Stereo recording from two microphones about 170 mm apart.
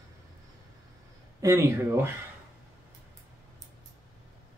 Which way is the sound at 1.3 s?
15° right (ahead or behind).